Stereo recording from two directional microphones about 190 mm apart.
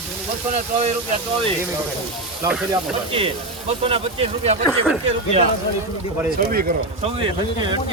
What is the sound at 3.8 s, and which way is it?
Speech, 30° right (ahead or behind).